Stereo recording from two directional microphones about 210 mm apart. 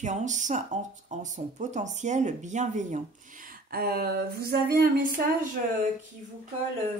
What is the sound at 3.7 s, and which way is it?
Speech, 45° right (ahead or behind).